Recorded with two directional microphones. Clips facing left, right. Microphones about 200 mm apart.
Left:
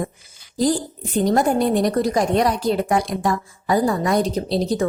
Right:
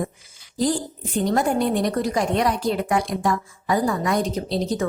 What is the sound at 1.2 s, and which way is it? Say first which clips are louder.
A woman's voice: left 3 dB; 40° left (ahead or behind).